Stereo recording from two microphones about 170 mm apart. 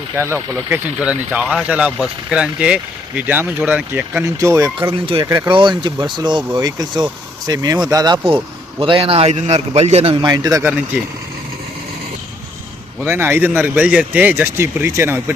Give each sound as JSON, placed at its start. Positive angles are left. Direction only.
{"t": 0.2, "sound": "speech", "side_deg": -10}
{"t": 4.9, "sound": "a man's voice", "side_deg": -30}
{"t": 10.2, "sound": "speech", "side_deg": -20}
{"t": 13.0, "sound": "speech", "side_deg": -15}